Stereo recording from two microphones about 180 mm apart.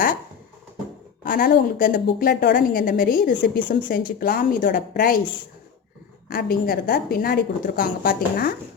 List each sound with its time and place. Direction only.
1.2 s a woman's voice: 50° left (ahead or behind)
6.2 s a woman's voice: 55° left (ahead or behind)